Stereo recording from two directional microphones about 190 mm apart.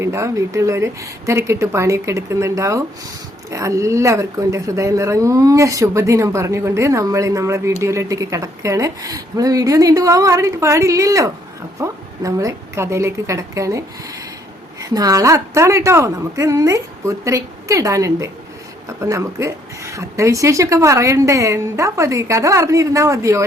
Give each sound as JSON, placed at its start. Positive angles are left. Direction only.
{"t": 0.0, "sound": "speech", "side_deg": -15}